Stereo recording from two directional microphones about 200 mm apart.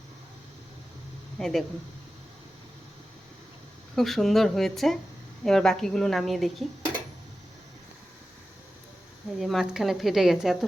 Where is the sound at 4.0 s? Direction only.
Centre (ahead or behind).